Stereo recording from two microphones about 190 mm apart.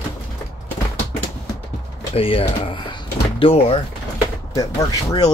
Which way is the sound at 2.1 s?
30° left (ahead or behind).